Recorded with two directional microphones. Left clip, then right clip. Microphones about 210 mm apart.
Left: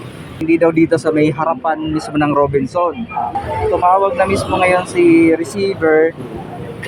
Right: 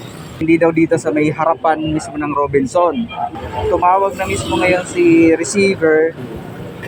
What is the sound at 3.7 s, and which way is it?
Speech, 5° right (ahead or behind).